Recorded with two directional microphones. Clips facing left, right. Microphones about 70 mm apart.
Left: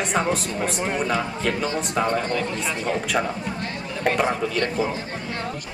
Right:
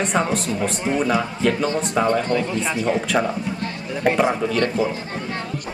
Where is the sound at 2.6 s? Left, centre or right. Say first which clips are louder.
Right 4 dB; centre.